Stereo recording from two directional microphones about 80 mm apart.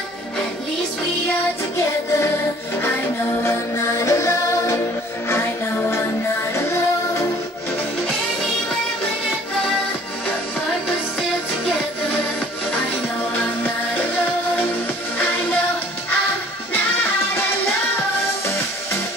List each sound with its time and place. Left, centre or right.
3.4 s music: left